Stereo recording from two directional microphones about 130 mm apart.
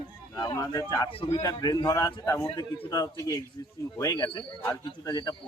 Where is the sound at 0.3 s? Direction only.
30° left (ahead or behind).